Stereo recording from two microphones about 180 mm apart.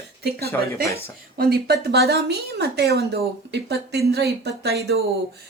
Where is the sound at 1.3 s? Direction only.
60° right (ahead or behind).